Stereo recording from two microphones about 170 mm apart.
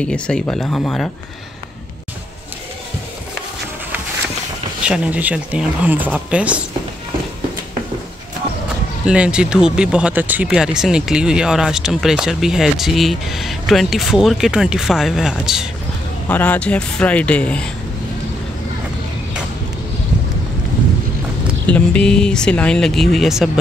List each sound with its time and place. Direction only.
0.0 s speech: 5° left (ahead or behind)
4.8 s speech: 5° right (ahead or behind)
9.0 s speech: 5° right (ahead or behind)
16.3 s speech: 10° left (ahead or behind)
21.6 s speech: 5° left (ahead or behind)